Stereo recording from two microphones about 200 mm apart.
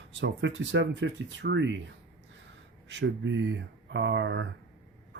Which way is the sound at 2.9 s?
65° right (ahead or behind).